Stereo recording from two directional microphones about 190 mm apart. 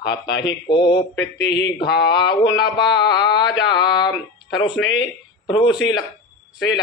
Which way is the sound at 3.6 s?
25° left (ahead or behind).